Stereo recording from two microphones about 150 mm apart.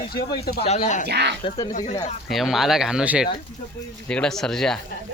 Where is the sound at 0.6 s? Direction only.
50° left (ahead or behind).